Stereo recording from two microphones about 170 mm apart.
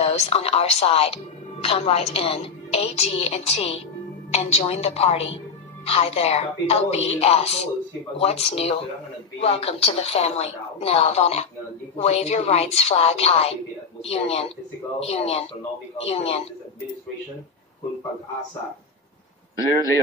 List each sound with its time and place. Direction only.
0.0 s speech: 35° left (ahead or behind)
19.6 s a man's voice: 20° left (ahead or behind)